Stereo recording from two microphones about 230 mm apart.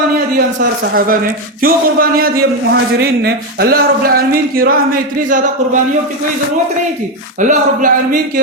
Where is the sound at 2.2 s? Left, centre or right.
Right.